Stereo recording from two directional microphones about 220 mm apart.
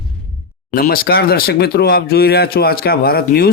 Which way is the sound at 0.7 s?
40° left (ahead or behind).